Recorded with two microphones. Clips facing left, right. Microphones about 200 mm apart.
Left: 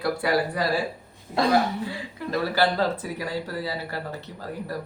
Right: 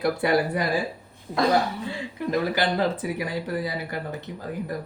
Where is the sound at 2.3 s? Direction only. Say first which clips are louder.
Left 1 dB; 20° right (ahead or behind).